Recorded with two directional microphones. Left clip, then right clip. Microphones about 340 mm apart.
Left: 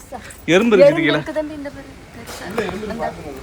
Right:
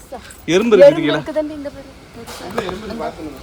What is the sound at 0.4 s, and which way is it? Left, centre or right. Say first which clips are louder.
Speech: right 2 dB; centre.